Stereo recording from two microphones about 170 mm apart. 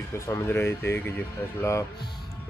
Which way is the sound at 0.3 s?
15° left (ahead or behind).